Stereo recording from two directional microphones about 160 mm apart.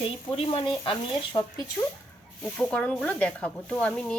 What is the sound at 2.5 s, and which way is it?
Speech, 5° left (ahead or behind).